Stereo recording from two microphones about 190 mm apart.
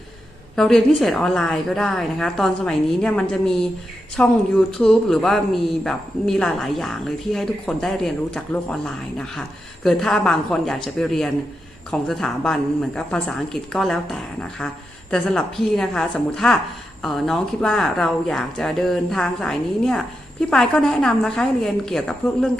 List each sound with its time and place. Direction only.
0.5 s a woman's voice: centre (ahead or behind)